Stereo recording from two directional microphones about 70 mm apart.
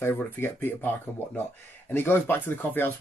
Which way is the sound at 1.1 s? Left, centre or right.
Centre.